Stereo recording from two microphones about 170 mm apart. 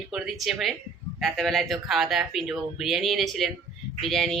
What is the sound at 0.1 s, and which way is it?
A woman's voice, centre (ahead or behind).